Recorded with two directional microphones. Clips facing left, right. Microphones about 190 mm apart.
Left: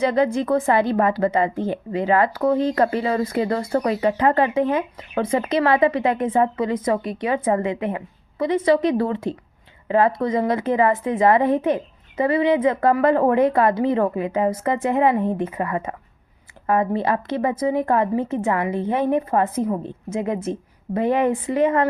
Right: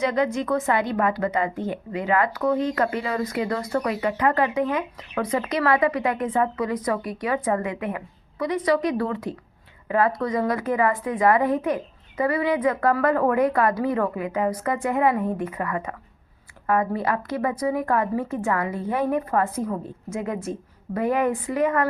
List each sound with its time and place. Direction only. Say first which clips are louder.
0.0 s a woman's voice: left 4 dB; 30° left (ahead or behind)